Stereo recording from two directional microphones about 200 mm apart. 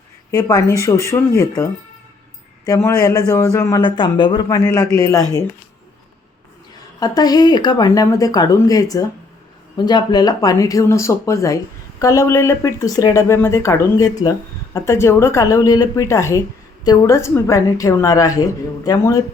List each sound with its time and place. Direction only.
0.3 s speech: 15° left (ahead or behind)
2.6 s speech: 15° left (ahead or behind)
7.0 s speech: 20° left (ahead or behind)